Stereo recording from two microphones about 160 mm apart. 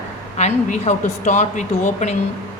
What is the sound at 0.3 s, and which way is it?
Speech, 45° left (ahead or behind).